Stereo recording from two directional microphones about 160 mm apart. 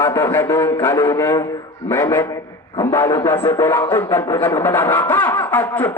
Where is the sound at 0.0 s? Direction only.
15° left (ahead or behind).